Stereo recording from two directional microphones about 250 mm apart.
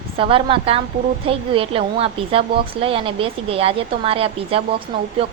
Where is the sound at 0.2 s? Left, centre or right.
Right.